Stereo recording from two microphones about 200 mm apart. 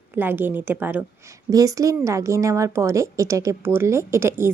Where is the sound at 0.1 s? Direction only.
10° right (ahead or behind).